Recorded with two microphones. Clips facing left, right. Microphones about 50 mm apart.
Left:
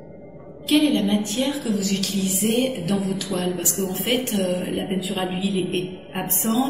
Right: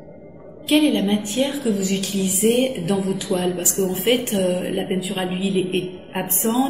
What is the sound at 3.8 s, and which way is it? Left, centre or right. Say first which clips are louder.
A woman's voice: right 5 dB; centre.